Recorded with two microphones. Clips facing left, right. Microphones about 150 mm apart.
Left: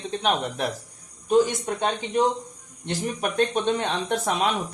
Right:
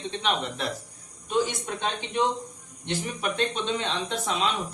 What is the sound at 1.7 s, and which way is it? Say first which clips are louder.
Speech: left 5 dB; 45° left (ahead or behind).